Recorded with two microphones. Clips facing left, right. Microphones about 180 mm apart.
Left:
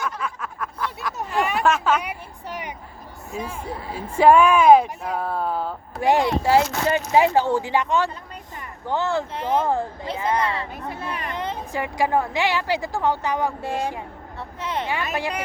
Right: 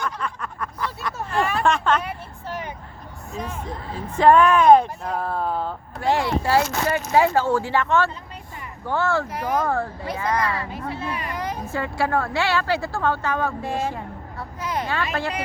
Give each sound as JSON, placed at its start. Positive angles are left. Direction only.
{"t": 0.0, "sound": "a sound", "side_deg": 5}
{"t": 3.3, "sound": "speech", "side_deg": 10}
{"t": 6.0, "sound": "speech", "side_deg": 15}
{"t": 10.8, "sound": "speech", "side_deg": 45}
{"t": 11.3, "sound": "a sound", "side_deg": 25}
{"t": 11.7, "sound": "speech", "side_deg": 15}
{"t": 14.6, "sound": "vehicle", "side_deg": 25}
{"t": 14.8, "sound": "speech", "side_deg": 15}